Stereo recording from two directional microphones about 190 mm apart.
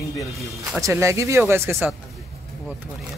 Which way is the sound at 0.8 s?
15° right (ahead or behind).